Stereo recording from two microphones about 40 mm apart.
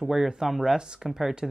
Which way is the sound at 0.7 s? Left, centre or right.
Centre.